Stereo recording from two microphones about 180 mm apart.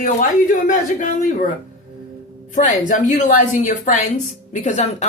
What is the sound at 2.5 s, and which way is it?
A woman's voice, 45° left (ahead or behind).